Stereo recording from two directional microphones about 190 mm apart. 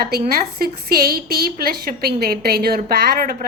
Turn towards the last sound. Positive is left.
turn(degrees=-50)  # may be behind; listen again after turning